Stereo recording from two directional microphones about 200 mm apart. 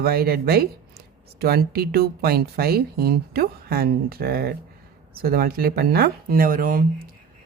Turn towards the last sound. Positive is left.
turn(degrees=-45)  # may be behind; listen again after turning